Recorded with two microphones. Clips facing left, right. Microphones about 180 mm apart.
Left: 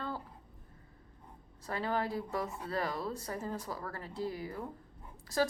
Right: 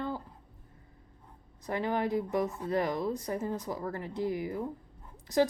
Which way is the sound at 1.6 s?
20° right (ahead or behind).